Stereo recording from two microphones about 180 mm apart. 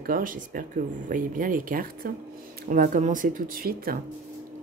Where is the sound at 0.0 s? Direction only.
50° right (ahead or behind).